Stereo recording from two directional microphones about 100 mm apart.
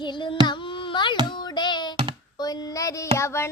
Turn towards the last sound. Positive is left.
turn(degrees=25)  # may be behind; listen again after turning